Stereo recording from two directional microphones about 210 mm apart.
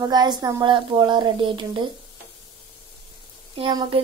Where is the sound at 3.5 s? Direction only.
25° right (ahead or behind).